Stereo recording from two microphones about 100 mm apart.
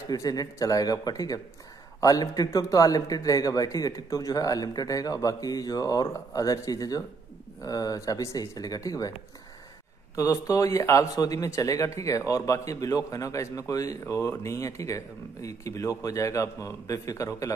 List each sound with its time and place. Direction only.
0.1 s a man's voice: 40° left (ahead or behind)
10.1 s a man's voice: 30° left (ahead or behind)